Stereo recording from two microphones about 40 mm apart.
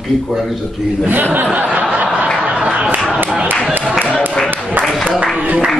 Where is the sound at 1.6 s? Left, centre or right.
Right.